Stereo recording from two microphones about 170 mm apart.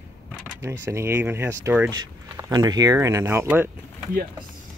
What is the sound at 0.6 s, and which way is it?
Speech, 15° right (ahead or behind).